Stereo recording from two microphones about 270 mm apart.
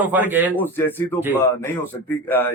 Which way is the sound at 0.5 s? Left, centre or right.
Centre.